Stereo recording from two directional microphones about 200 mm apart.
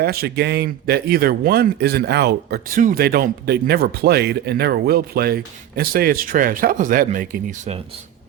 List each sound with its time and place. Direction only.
0.0 s speech: 50° right (ahead or behind)